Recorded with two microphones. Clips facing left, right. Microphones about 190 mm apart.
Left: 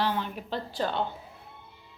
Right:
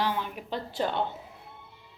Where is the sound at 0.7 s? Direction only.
20° right (ahead or behind).